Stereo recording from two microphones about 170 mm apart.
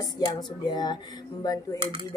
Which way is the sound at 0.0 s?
25° left (ahead or behind).